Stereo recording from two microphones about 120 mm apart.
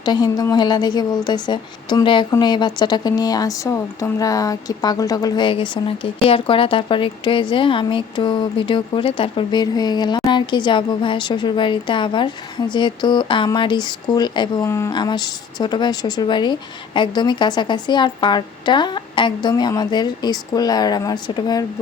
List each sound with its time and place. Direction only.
0.0 s a woman's voice: 35° left (ahead or behind)
14.6 s speech: 20° left (ahead or behind)
14.8 s a woman's voice: 35° left (ahead or behind)